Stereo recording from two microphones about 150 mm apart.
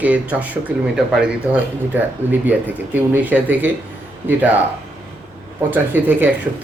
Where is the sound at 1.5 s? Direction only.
10° right (ahead or behind).